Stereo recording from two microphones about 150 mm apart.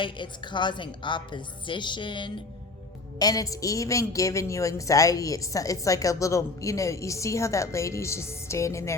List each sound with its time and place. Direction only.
0.0 s a woman's voice: 30° left (ahead or behind)